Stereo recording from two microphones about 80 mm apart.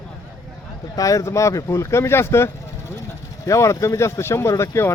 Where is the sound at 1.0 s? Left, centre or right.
Left.